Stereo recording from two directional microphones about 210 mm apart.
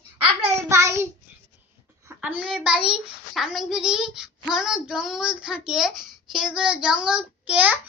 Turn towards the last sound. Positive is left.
turn(degrees=-5)  # may be behind; listen again after turning